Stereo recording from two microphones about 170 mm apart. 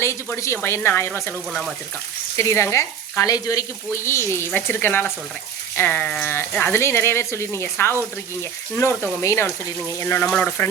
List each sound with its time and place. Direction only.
0.0 s speech: 15° left (ahead or behind)
2.4 s frying: 15° left (ahead or behind)
3.9 s speech: 15° left (ahead or behind)